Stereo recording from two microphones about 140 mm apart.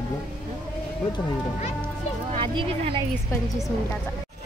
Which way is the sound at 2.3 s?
40° right (ahead or behind).